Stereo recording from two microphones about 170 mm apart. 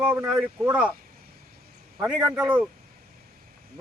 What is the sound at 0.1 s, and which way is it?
Speech, 5° right (ahead or behind).